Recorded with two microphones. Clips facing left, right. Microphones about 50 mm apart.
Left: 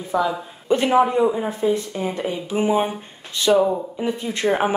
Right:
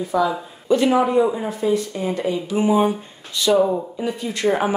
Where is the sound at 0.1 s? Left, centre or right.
Left.